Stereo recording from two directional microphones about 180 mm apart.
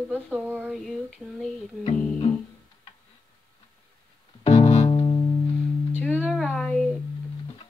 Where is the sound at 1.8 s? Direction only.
30° left (ahead or behind).